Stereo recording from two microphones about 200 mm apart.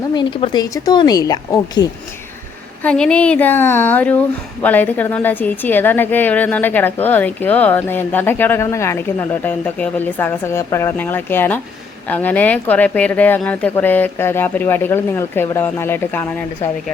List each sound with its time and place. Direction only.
0.1 s speech: 25° left (ahead or behind)
2.8 s a woman's voice: 5° left (ahead or behind)